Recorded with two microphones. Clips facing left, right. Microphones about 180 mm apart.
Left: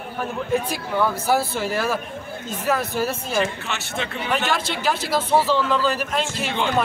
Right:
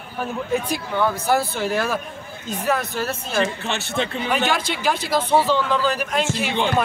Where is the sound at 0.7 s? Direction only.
5° left (ahead or behind).